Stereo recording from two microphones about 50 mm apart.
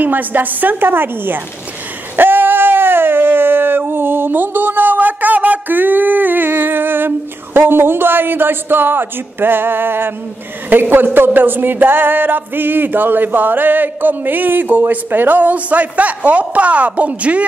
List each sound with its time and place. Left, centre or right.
0.0 s music: right
2.1 s a sound: right
10.7 s music: right